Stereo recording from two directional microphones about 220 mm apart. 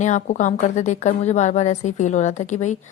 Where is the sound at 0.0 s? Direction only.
35° left (ahead or behind).